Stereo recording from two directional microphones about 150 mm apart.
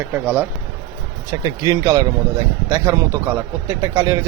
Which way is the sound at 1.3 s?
25° right (ahead or behind).